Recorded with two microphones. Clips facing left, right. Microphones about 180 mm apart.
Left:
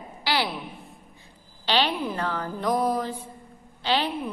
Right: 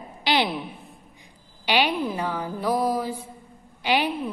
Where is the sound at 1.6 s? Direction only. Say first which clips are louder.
Right 2 dB; 10° right (ahead or behind).